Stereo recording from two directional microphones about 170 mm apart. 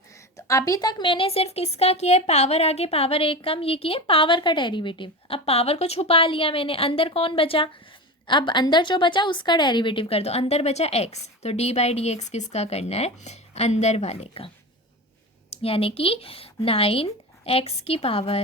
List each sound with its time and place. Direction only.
0.3 s a woman's voice: 20° left (ahead or behind); by 18.3 s 35° left (ahead or behind)